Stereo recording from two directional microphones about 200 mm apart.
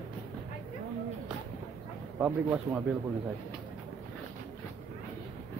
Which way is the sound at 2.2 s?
5° right (ahead or behind).